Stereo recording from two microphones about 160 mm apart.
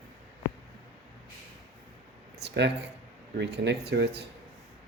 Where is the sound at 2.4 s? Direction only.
90° right.